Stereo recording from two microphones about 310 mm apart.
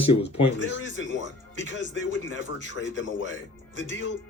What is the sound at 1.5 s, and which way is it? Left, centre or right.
Speech, left.